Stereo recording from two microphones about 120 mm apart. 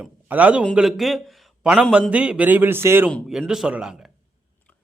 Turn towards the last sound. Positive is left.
turn(degrees=-5)  # may be behind; listen again after turning